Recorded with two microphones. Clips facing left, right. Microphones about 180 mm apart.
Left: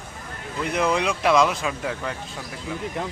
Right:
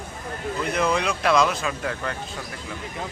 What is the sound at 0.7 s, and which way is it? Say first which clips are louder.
Speech: left 2 dB; 10° left (ahead or behind).